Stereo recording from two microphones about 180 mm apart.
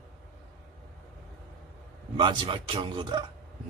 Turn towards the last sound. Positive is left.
turn(degrees=-25)  # may be behind; listen again after turning